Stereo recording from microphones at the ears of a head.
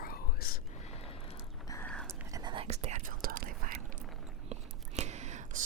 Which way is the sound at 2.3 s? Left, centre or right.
Right.